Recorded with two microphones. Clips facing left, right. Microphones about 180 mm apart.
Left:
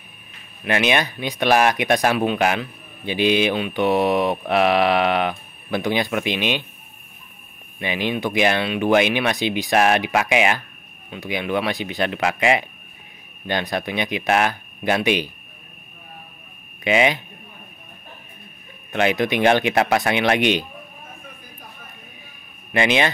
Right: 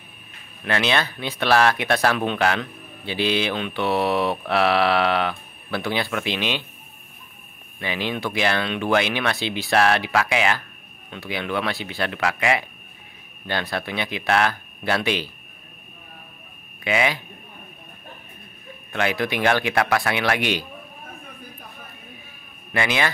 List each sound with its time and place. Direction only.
0.7 s speech: 15° left (ahead or behind)
7.8 s speech: 15° left (ahead or behind)
16.8 s speech: 20° left (ahead or behind)
18.9 s speech: 20° left (ahead or behind)
22.7 s speech: 20° left (ahead or behind)